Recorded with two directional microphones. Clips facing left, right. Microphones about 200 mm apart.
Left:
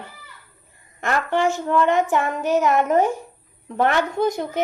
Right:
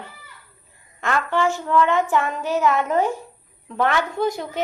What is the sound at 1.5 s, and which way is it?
Speech, 20° left (ahead or behind).